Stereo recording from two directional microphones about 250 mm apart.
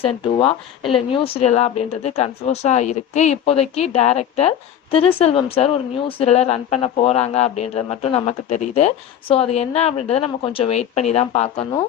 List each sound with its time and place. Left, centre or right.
0.9 s speech: left